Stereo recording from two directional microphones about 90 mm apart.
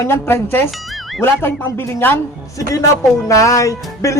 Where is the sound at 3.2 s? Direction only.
35° left (ahead or behind).